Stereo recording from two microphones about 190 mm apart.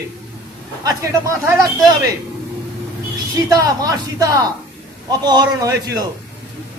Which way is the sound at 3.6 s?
20° right (ahead or behind).